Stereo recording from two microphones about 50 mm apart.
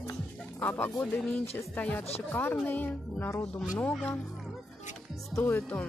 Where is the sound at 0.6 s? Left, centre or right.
Left.